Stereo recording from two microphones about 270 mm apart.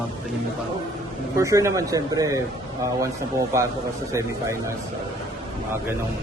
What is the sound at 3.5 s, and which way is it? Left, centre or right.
Speech, centre.